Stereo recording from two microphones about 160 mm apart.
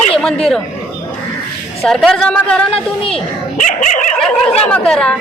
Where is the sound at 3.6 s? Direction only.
50° left (ahead or behind).